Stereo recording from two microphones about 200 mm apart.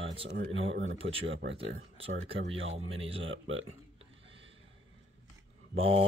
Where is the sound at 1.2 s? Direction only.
65° right (ahead or behind).